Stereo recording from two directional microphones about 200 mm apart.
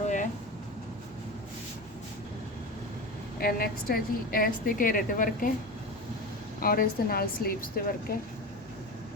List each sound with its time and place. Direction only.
3.4 s a woman's voice: 50° left (ahead or behind)
6.6 s a woman's voice: 45° left (ahead or behind)